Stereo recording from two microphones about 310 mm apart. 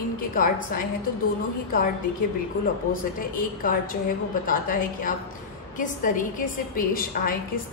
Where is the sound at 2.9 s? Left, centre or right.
Left.